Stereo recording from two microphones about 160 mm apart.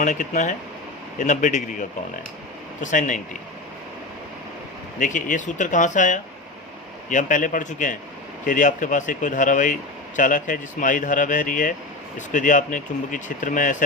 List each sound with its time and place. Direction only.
0.0 s speech: 50° left (ahead or behind)
4.9 s speech: 55° left (ahead or behind)